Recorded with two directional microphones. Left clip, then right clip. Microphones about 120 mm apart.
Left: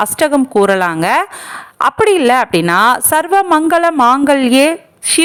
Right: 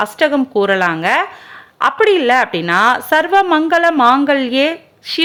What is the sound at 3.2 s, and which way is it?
A woman's voice, 45° left (ahead or behind).